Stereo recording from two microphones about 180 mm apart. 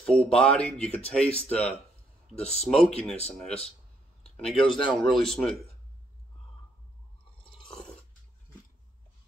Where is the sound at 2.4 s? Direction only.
35° left (ahead or behind).